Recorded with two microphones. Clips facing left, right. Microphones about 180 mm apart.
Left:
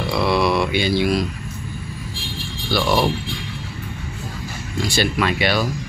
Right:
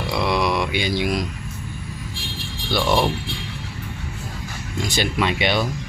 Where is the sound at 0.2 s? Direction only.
15° right (ahead or behind).